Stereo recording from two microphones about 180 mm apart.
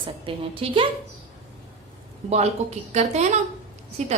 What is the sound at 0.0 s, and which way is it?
Speech, 30° right (ahead or behind).